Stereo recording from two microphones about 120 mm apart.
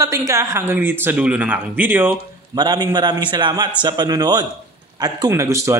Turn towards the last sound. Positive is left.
turn(degrees=-25)  # may be behind; listen again after turning